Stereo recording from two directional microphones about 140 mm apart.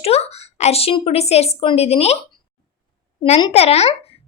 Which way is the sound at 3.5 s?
50° left (ahead or behind).